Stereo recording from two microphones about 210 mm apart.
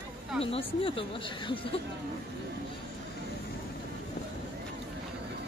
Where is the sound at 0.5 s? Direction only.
25° left (ahead or behind).